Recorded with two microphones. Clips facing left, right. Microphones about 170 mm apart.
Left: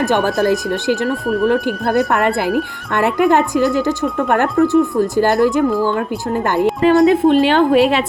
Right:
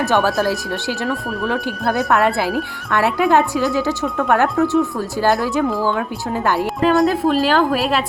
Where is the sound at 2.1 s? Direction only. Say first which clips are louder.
Left 1 dB; 20° left (ahead or behind).